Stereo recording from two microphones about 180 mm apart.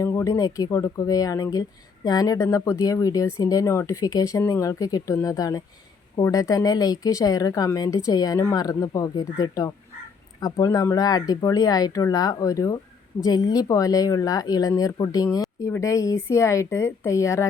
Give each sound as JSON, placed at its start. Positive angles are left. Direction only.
{"t": 0.0, "sound": "speech", "side_deg": 15}